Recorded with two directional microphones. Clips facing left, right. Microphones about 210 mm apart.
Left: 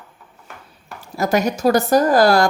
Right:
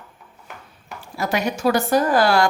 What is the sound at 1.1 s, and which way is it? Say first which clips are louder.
A woman's voice: left 5 dB; 45° left (ahead or behind).